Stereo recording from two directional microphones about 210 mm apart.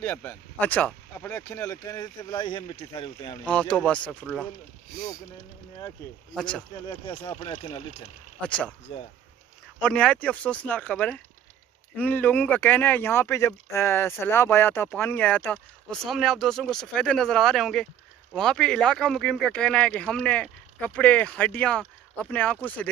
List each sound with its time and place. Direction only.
0.0 s speech: 10° left (ahead or behind); by 3.3 s 25° left (ahead or behind)
3.4 s speech: 5° left (ahead or behind)
6.3 s speech: 5° left (ahead or behind)
6.9 s speech: 20° left (ahead or behind)
8.4 s speech: 5° left (ahead or behind)
9.8 s speech: 5° left (ahead or behind)